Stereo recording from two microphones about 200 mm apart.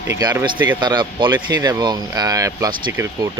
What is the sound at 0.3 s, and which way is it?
Speech, 10° right (ahead or behind).